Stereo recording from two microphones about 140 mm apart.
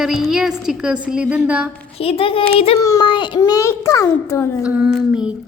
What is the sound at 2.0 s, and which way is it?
Speech, 45° left (ahead or behind).